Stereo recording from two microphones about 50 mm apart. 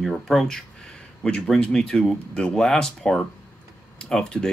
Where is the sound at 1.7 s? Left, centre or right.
Centre.